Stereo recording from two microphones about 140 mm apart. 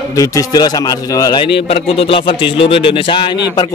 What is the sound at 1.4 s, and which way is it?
Speech, 40° left (ahead or behind).